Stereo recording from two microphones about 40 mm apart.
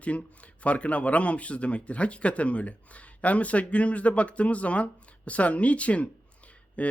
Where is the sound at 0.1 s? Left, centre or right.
Left.